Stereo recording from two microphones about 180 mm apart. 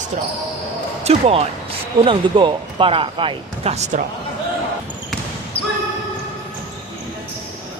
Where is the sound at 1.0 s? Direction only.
35° right (ahead or behind).